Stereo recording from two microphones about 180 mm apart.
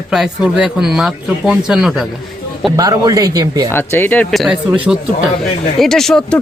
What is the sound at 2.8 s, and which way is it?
Speech, 20° right (ahead or behind).